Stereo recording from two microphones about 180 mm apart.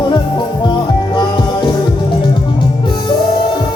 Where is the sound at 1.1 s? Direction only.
25° left (ahead or behind).